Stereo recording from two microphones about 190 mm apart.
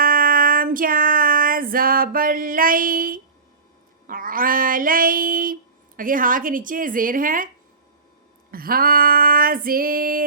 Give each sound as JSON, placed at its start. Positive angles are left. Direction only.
{"t": 0.0, "sound": "female singing", "side_deg": -50}
{"t": 6.0, "sound": "a woman's voice", "side_deg": -45}
{"t": 8.4, "sound": "female singing", "side_deg": -50}